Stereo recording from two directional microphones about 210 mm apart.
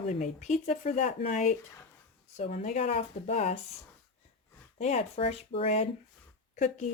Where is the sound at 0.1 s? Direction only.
35° left (ahead or behind).